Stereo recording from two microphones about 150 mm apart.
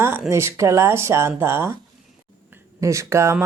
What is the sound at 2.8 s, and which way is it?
Speech, 20° right (ahead or behind).